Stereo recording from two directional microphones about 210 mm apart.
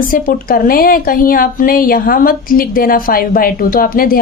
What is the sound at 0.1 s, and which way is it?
A woman's voice, 40° left (ahead or behind).